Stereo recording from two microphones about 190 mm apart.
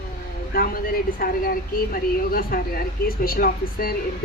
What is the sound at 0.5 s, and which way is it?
A woman's voice, 50° left (ahead or behind).